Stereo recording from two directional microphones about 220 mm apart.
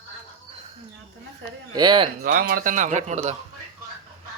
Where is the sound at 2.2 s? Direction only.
45° right (ahead or behind).